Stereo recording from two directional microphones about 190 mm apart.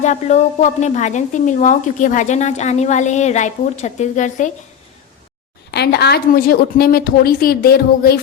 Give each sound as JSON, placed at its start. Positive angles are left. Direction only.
{"t": 0.0, "sound": "a woman's voice", "side_deg": 40}
{"t": 5.7, "sound": "a woman's voice", "side_deg": 60}